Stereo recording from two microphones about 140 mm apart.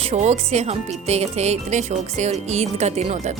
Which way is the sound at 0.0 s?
50° right (ahead or behind).